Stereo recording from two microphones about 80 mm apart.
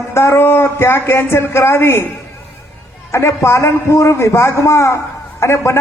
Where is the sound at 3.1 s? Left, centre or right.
Left.